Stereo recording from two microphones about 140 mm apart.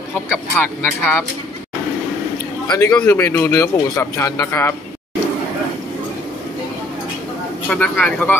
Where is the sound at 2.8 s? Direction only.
10° left (ahead or behind).